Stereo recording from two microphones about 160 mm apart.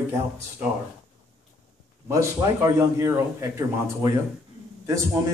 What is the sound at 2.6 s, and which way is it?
Speech, 15° right (ahead or behind).